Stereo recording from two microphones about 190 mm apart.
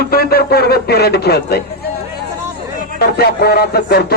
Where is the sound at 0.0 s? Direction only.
55° left (ahead or behind).